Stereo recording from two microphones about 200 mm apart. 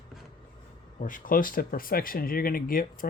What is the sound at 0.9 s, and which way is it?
Speech, 40° left (ahead or behind).